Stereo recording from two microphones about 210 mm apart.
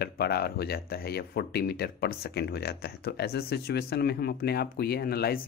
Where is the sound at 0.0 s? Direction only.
50° left (ahead or behind).